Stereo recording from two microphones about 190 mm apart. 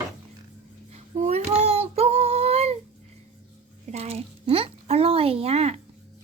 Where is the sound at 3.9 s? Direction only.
35° right (ahead or behind).